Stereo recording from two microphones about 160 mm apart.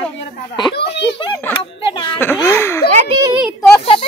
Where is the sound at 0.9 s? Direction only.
90° left.